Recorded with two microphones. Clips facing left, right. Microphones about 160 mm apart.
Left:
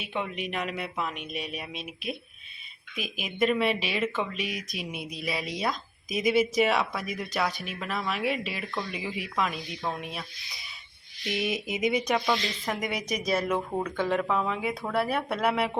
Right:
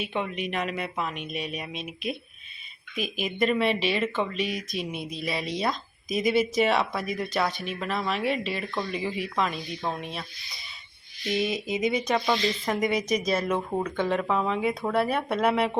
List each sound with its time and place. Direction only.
0.0 s speech: centre (ahead or behind)
11.4 s speech: 20° left (ahead or behind)